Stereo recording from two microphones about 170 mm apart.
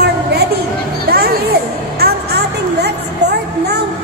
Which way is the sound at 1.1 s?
65° right (ahead or behind).